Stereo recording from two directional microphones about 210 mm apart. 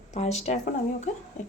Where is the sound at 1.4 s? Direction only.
35° left (ahead or behind).